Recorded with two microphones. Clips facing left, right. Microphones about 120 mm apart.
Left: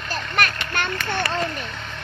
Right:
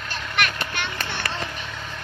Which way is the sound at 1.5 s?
Centre (ahead or behind).